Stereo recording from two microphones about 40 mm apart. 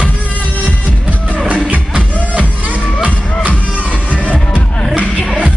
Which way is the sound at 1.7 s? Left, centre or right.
Right.